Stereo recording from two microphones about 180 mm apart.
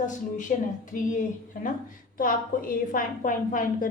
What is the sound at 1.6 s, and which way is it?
A woman's voice, 50° left (ahead or behind).